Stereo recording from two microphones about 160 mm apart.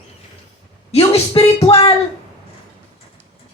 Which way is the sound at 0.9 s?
40° left (ahead or behind).